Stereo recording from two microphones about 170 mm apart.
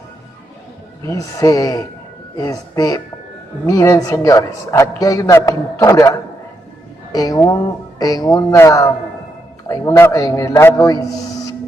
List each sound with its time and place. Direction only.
1.0 s a man's voice: 20° left (ahead or behind)